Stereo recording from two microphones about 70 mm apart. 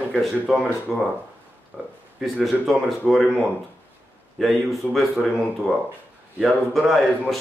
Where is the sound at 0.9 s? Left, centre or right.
Centre.